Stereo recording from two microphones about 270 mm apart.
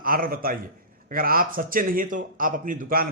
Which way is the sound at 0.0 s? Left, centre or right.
Right.